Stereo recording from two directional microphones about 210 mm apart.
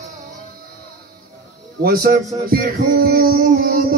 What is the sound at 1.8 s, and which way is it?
Speech, 45° right (ahead or behind).